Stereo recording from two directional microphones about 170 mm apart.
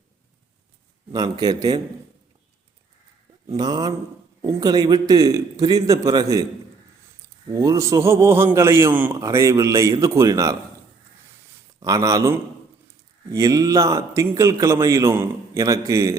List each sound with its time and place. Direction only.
1.1 s a man's voice: 25° right (ahead or behind)
3.5 s a man's voice: 25° right (ahead or behind)
7.5 s a man's voice: 20° right (ahead or behind)
11.8 s a man's voice: 20° right (ahead or behind)